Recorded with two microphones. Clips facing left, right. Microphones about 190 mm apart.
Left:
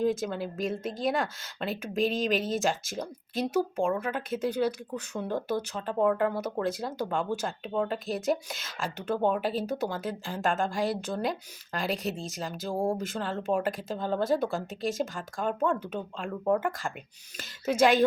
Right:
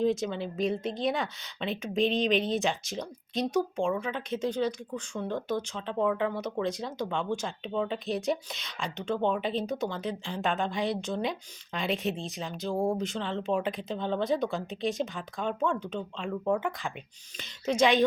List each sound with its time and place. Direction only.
0.0 s speech: 5° left (ahead or behind)
12.7 s speech: 30° left (ahead or behind)
13.0 s speech: 5° left (ahead or behind)